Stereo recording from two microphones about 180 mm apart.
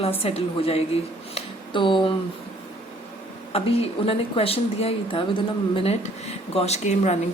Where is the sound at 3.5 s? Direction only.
35° left (ahead or behind).